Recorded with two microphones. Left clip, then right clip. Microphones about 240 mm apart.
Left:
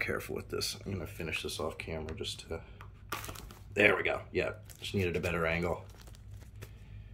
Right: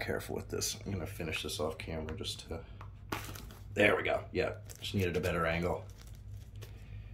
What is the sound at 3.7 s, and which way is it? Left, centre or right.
Speech, centre.